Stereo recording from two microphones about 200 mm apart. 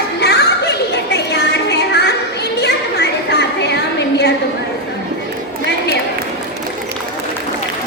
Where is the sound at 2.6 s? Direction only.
55° left (ahead or behind).